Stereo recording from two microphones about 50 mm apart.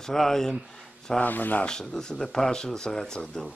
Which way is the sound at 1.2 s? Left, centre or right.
Left.